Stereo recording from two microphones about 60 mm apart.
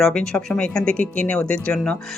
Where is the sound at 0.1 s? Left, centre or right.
Centre.